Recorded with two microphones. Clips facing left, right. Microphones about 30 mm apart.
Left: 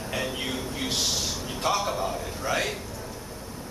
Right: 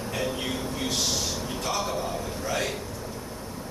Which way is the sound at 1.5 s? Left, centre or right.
Centre.